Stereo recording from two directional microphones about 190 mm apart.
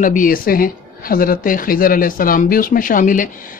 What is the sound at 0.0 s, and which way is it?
Speech, 45° left (ahead or behind).